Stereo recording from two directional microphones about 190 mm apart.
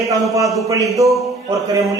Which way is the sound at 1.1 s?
Centre (ahead or behind).